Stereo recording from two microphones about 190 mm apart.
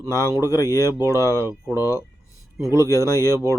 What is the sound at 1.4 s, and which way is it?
Speech, 15° right (ahead or behind).